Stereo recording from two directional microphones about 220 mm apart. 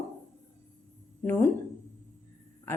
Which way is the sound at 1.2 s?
10° left (ahead or behind).